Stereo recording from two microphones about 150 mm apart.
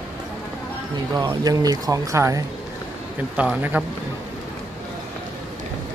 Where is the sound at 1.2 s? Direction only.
25° right (ahead or behind).